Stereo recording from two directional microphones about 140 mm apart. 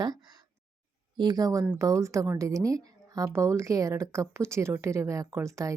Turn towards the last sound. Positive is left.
turn(degrees=-20)  # may be behind; listen again after turning